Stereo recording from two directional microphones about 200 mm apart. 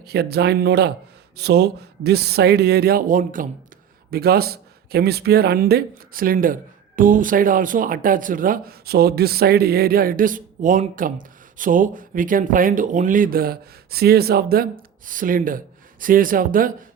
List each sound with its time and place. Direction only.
0.0 s speech: 55° right (ahead or behind)